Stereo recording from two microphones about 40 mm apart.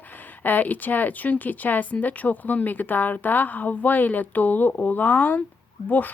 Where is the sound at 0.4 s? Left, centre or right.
Left.